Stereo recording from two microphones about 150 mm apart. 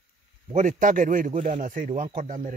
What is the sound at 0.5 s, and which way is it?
Speech, 60° right (ahead or behind).